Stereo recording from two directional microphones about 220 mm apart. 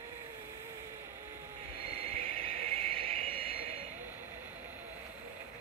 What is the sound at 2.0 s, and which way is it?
Vehicle, 25° right (ahead or behind).